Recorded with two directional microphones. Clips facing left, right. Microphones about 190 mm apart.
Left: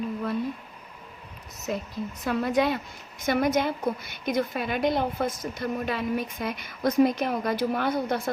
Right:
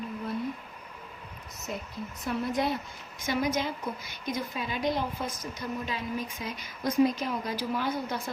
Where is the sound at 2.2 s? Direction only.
80° left.